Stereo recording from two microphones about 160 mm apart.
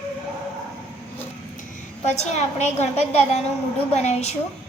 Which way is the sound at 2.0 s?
45° left (ahead or behind).